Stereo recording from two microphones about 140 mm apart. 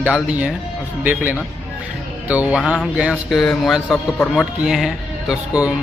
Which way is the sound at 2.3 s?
10° right (ahead or behind).